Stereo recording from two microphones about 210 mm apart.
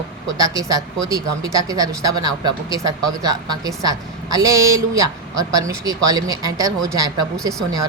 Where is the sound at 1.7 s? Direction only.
15° right (ahead or behind).